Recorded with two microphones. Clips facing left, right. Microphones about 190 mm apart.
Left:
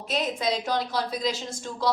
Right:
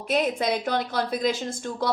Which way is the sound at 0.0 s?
55° right (ahead or behind).